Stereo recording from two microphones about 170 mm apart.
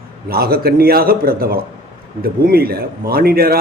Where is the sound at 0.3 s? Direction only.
65° right (ahead or behind).